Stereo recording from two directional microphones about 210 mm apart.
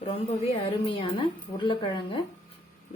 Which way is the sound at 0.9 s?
25° left (ahead or behind).